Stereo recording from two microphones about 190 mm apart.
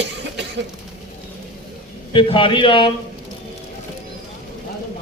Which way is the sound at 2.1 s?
25° left (ahead or behind).